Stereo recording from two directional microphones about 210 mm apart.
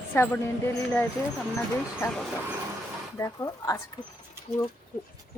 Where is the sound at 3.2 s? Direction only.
15° left (ahead or behind).